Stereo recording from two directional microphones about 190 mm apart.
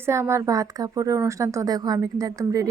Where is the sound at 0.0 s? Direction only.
15° right (ahead or behind).